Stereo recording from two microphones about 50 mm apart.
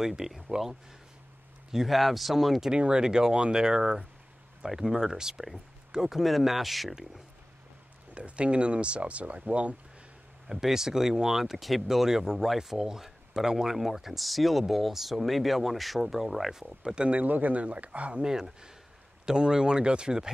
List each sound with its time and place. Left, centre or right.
0.0 s speech: centre
1.7 s speech: centre
2.7 s speech: centre
8.1 s speech: right
10.4 s speech: centre
16.9 s speech: centre
17.2 s speech: right
18.2 s speech: centre